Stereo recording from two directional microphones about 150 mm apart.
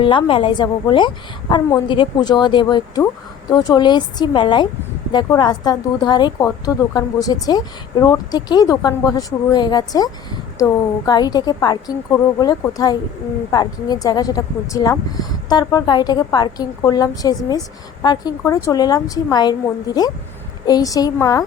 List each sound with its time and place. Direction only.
0.0 s a woman's voice: 35° left (ahead or behind)